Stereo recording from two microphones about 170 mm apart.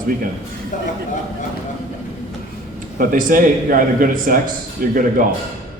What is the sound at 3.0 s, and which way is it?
A man's voice, 55° right (ahead or behind).